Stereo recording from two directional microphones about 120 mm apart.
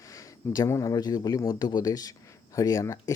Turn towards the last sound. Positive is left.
turn(degrees=30)  # may be behind; listen again after turning